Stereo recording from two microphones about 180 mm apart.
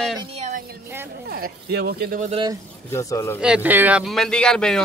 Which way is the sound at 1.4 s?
60° right (ahead or behind).